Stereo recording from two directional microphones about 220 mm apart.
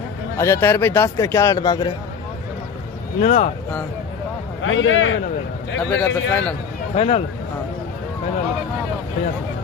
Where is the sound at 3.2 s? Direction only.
35° left (ahead or behind).